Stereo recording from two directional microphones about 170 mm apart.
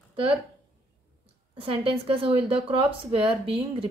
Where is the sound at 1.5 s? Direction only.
30° right (ahead or behind).